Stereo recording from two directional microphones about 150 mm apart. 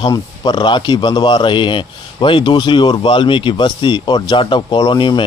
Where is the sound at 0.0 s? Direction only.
30° left (ahead or behind).